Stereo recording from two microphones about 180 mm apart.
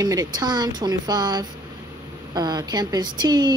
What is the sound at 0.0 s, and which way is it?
Speech, 20° right (ahead or behind).